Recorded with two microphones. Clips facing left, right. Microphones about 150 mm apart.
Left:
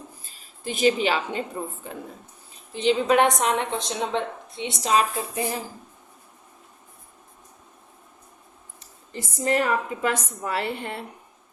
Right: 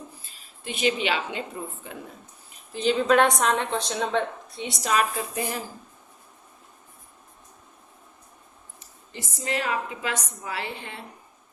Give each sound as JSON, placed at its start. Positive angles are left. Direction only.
{"t": 0.6, "sound": "a woman's voice", "side_deg": 40}
{"t": 2.7, "sound": "a woman's voice", "side_deg": 20}
{"t": 9.1, "sound": "a woman's voice", "side_deg": 50}